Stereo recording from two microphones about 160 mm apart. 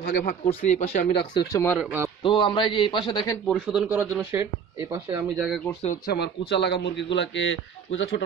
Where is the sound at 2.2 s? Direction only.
30° left (ahead or behind).